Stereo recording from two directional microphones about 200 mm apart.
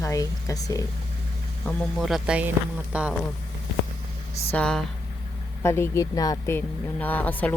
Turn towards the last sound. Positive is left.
turn(degrees=10)  # may be behind; listen again after turning